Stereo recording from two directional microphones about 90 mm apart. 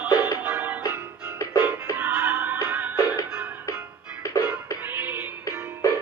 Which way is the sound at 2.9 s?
40° left (ahead or behind).